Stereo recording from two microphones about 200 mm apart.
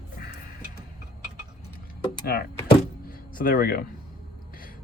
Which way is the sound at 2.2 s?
50° left (ahead or behind).